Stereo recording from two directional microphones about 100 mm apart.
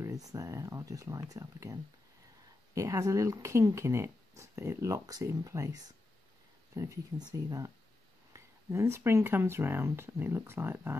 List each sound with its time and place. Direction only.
0.0 s speech: 35° right (ahead or behind)
7.2 s speech: 45° right (ahead or behind); by 11.0 s 25° right (ahead or behind)